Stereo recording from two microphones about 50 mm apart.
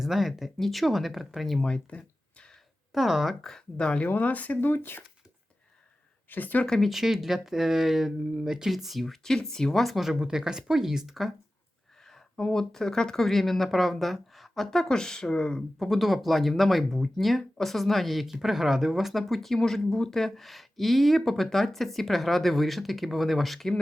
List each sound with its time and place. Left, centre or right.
0.0 s speech: centre
1.5 s a sound: centre
2.9 s speech: centre
3.4 s speech: centre
4.1 s speech: left
6.3 s speech: left
6.7 s speech: centre
12.0 s speech: centre
15.8 s speech: centre